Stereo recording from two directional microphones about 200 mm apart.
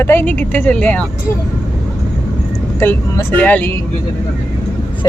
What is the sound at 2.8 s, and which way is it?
Speech, 10° left (ahead or behind).